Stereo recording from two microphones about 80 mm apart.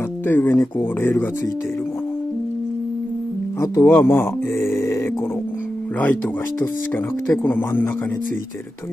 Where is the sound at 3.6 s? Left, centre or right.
Left.